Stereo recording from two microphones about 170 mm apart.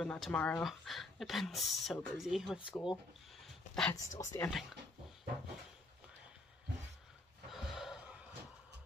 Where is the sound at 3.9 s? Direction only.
20° left (ahead or behind).